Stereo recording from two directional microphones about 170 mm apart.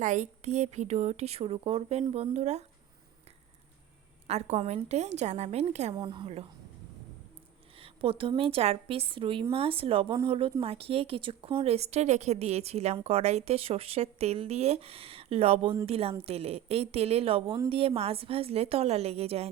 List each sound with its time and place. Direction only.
0.0 s speech: 45° right (ahead or behind)
4.3 s speech: 40° right (ahead or behind)
5.9 s a woman's voice: 25° right (ahead or behind)
7.8 s speech: 35° right (ahead or behind)